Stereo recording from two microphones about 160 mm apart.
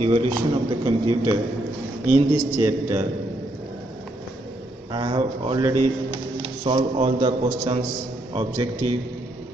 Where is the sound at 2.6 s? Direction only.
20° right (ahead or behind).